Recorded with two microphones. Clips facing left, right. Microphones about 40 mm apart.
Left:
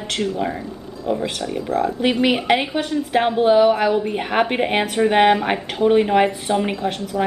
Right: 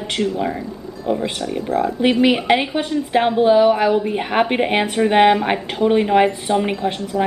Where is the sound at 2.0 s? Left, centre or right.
Centre.